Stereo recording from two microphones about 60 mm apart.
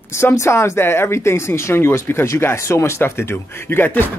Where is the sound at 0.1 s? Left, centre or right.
Left.